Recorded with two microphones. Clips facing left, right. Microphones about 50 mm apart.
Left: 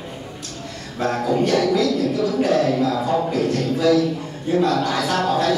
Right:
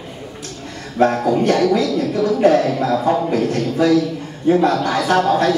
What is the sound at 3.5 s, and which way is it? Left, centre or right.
Speech, right.